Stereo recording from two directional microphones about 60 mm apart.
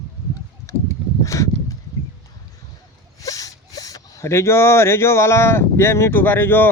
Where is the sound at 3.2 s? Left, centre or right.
Left.